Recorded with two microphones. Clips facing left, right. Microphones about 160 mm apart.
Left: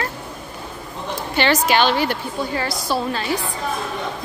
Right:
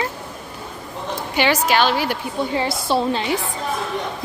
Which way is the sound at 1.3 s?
10° right (ahead or behind).